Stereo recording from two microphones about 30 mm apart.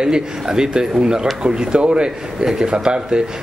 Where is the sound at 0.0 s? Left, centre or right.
Right.